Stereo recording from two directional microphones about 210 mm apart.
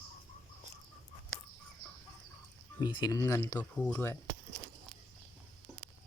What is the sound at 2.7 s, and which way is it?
Speech, 20° left (ahead or behind).